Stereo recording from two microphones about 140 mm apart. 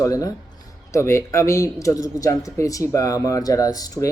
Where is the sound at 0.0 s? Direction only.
25° left (ahead or behind).